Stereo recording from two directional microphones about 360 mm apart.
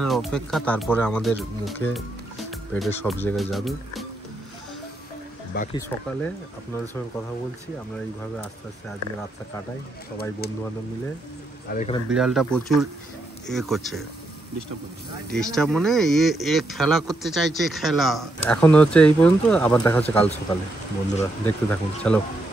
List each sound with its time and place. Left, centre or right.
0.0 s speech: centre
5.7 s speech: centre
11.7 s speech: centre
12.1 s speech: centre
15.3 s speech: centre
21.5 s speech: centre